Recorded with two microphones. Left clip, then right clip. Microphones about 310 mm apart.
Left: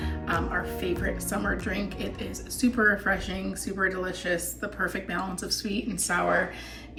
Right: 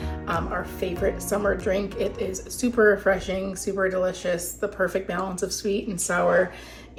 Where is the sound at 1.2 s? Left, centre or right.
Centre.